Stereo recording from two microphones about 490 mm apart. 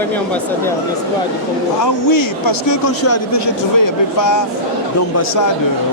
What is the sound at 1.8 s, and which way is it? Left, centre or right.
A man's voice, left.